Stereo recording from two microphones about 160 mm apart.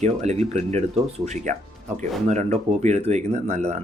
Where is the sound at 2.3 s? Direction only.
45° right (ahead or behind).